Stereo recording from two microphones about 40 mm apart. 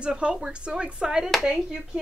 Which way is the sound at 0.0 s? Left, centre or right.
Right.